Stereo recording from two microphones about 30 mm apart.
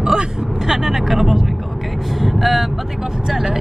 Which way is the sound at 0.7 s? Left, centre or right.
Centre.